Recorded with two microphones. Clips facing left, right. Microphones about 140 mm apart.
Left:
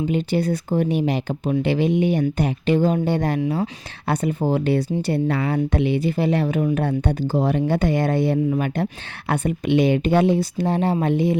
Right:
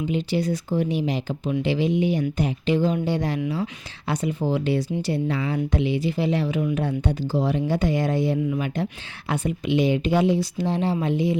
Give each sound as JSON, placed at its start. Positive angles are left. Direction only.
{"t": 0.1, "sound": "speech", "side_deg": 55}
{"t": 8.4, "sound": "speech", "side_deg": 50}